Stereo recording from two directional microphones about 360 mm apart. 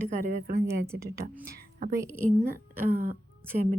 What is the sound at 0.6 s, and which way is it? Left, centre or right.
Speech, centre.